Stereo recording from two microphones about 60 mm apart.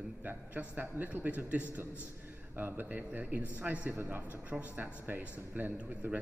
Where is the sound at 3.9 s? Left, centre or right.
Right.